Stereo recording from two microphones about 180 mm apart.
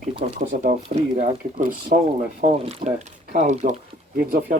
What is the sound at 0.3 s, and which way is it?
Speech, 45° right (ahead or behind).